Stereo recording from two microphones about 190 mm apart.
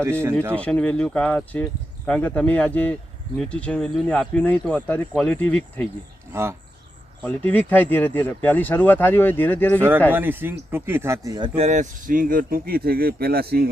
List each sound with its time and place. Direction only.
0.0 s speech: 15° right (ahead or behind)
0.5 s speech: 5° left (ahead or behind)
6.3 s speech: 15° right (ahead or behind)
7.3 s speech: 10° left (ahead or behind)
10.1 s speech: 10° right (ahead or behind); by 13.7 s 55° right (ahead or behind)